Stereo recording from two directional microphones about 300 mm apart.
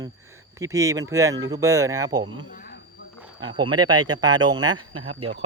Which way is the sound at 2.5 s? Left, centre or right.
Left.